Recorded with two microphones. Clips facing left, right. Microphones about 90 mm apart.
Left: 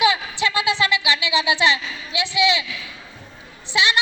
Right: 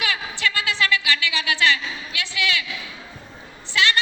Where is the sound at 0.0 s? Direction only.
20° left (ahead or behind).